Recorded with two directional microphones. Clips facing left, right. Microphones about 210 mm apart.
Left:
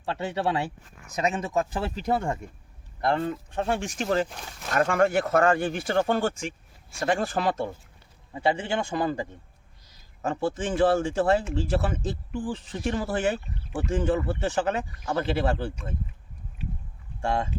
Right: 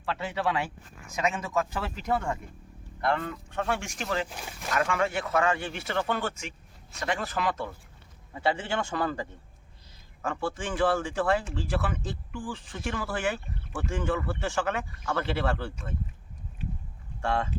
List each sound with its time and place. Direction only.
0.0 s speech: 30° left (ahead or behind)
4.3 s speech: 5° right (ahead or behind)
4.7 s speech: 45° left (ahead or behind)
5.7 s speech: 35° left (ahead or behind)
6.1 s speech: 45° left (ahead or behind)
7.0 s a man's voice: 30° left (ahead or behind)
14.6 s speech: 35° left (ahead or behind)
15.0 s a man's voice: 20° left (ahead or behind)
17.2 s a man's voice: 15° left (ahead or behind)